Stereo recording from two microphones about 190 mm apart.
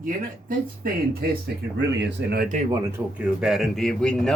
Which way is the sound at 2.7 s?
10° right (ahead or behind).